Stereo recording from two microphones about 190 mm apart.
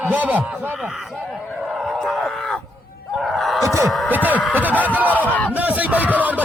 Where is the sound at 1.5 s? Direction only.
Centre (ahead or behind).